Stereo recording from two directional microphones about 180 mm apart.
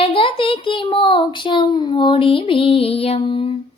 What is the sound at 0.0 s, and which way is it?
A child's voice, 30° left (ahead or behind).